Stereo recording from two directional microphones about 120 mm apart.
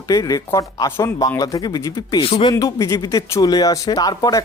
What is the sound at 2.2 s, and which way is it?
Speech, 50° left (ahead or behind).